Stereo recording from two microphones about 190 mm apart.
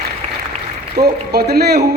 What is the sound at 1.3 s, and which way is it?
Speech, 60° right (ahead or behind).